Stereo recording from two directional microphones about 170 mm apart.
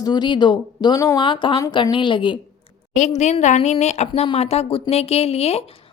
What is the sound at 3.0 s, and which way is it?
A woman's voice, 45° left (ahead or behind).